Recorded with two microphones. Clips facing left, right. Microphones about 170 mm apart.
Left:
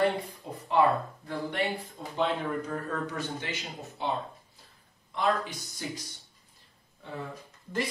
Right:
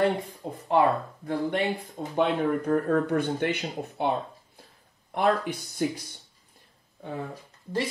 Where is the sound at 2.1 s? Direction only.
60° right (ahead or behind).